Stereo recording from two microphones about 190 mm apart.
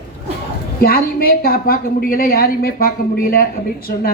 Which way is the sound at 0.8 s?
50° left (ahead or behind).